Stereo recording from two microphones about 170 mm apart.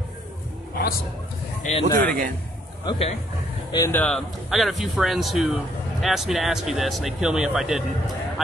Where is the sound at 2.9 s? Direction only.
35° left (ahead or behind).